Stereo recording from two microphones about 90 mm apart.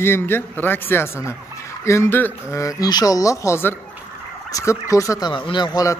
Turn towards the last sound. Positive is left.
turn(degrees=55)  # may be behind; listen again after turning